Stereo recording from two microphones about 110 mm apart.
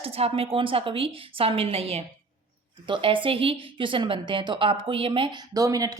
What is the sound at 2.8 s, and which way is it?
A woman's voice, 50° right (ahead or behind).